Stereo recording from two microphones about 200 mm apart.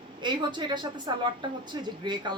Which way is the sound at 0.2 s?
25° right (ahead or behind).